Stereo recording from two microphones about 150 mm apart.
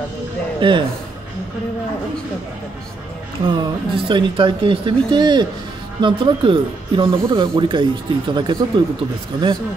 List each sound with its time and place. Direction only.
0.6 s a man's voice: 35° right (ahead or behind)
3.4 s speech: 30° right (ahead or behind)